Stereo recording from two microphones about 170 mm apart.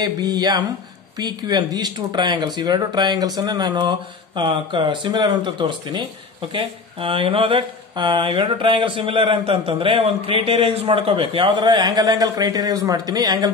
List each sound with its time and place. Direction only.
0.0 s a man's voice: 25° right (ahead or behind)